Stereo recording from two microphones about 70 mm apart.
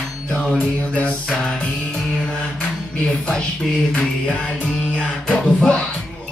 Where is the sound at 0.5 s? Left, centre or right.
Centre.